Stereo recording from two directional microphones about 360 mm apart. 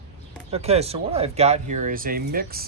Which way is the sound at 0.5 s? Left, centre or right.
Centre.